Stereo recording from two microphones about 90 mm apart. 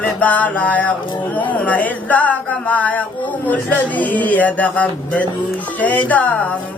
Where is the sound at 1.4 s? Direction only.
15° left (ahead or behind).